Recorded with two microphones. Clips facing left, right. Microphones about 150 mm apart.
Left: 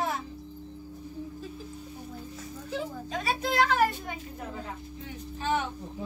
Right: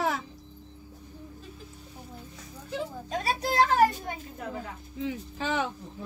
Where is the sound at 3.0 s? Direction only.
35° right (ahead or behind).